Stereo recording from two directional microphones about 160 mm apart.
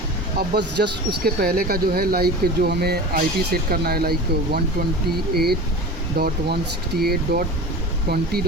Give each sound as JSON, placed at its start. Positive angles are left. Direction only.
{"t": 0.3, "sound": "speech", "side_deg": -80}